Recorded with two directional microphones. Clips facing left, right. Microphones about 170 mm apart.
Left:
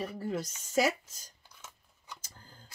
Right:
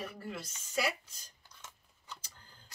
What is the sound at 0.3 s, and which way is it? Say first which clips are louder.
Speech: left 8 dB; 45° left (ahead or behind).